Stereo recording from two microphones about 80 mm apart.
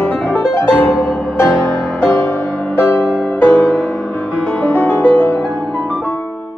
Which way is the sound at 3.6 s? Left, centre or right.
Centre.